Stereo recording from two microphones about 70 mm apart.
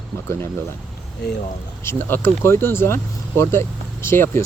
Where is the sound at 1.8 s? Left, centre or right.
Left.